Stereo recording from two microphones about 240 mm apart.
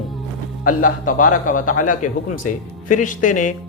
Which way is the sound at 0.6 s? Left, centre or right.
Left.